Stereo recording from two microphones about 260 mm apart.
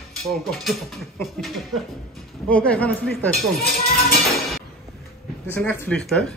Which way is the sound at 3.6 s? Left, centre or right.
Left.